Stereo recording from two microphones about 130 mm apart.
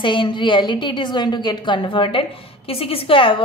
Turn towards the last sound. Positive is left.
turn(degrees=40)  # may be behind; listen again after turning